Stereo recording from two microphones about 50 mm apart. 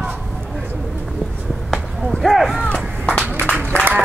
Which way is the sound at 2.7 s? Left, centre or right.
Centre.